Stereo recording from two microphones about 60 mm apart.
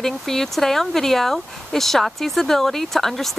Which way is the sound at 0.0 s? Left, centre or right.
Centre.